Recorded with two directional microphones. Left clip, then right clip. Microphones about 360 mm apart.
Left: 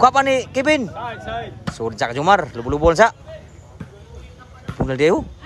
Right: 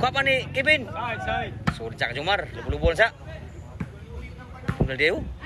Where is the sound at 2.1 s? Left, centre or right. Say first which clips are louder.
Left 12 dB; left.